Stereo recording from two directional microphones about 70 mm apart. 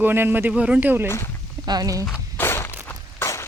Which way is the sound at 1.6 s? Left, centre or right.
Right.